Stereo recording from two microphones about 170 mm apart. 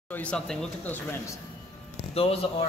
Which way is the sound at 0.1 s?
5° left (ahead or behind).